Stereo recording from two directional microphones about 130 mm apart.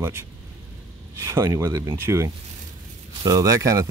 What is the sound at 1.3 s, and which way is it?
Speech, 20° right (ahead or behind).